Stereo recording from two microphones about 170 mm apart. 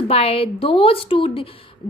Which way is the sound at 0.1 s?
35° left (ahead or behind).